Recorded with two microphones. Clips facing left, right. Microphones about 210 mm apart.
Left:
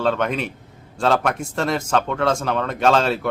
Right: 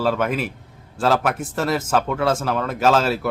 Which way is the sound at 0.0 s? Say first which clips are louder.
Even; 5° right (ahead or behind).